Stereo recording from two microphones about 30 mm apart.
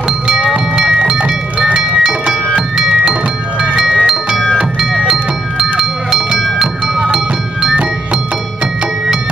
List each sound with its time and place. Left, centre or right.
1.7 s music: centre
2.8 s tubular bells: centre
4.0 s music: right